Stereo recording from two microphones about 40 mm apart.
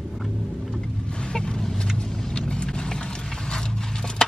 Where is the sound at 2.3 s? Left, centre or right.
Left.